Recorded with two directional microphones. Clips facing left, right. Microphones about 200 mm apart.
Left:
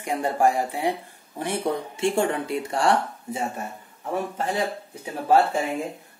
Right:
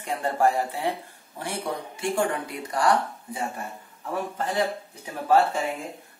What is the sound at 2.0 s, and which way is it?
Speech, 25° left (ahead or behind).